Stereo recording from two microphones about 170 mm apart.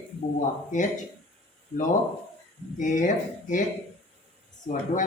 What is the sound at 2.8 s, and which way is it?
Speech, 50° left (ahead or behind).